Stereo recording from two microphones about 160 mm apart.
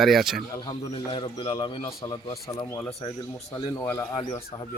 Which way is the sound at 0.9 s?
35° left (ahead or behind).